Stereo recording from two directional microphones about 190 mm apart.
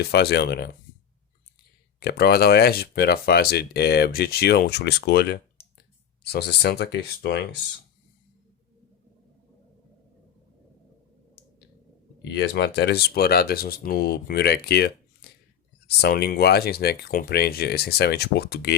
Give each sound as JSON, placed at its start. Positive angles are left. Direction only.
{"t": 0.0, "sound": "speech", "side_deg": 55}
{"t": 2.0, "sound": "speech", "side_deg": 55}
{"t": 12.2, "sound": "speech", "side_deg": 65}